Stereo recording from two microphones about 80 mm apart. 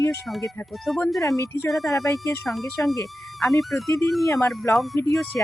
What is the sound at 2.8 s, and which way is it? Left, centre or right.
Speech, left.